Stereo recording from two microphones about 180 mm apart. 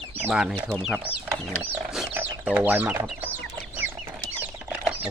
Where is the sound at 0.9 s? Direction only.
10° right (ahead or behind).